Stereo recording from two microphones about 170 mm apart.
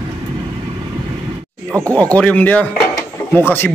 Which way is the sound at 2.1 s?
10° left (ahead or behind).